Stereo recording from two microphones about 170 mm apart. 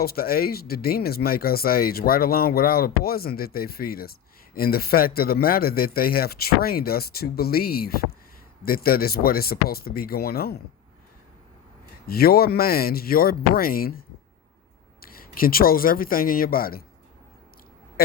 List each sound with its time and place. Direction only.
0.0 s speech: 60° left (ahead or behind)
12.0 s speech: 65° left (ahead or behind)
15.0 s speech: 60° left (ahead or behind)